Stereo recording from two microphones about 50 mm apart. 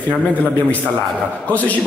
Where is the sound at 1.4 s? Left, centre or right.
Left.